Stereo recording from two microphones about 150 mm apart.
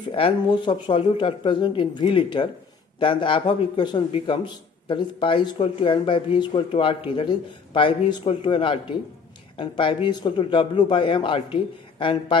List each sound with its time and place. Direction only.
0.1 s speech: 35° left (ahead or behind)